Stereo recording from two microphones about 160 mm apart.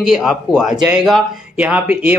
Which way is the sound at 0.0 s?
5° right (ahead or behind).